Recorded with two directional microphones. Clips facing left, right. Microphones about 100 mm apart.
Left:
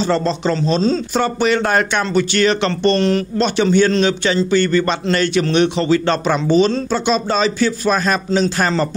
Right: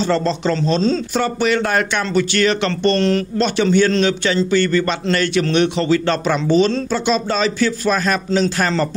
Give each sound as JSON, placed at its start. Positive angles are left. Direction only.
{"t": 0.1, "sound": "a man's voice", "side_deg": 20}